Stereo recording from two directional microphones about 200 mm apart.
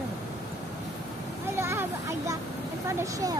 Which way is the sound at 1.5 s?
10° right (ahead or behind).